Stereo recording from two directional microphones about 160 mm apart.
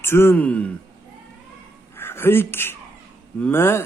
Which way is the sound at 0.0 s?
15° left (ahead or behind).